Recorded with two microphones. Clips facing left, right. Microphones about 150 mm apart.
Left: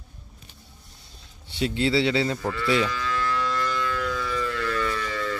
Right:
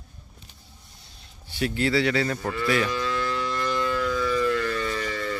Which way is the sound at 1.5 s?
25° left (ahead or behind).